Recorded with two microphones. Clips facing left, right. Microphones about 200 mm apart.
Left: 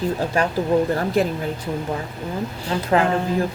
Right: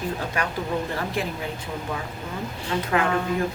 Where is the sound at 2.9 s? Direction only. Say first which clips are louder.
Left 5 dB; 30° left (ahead or behind).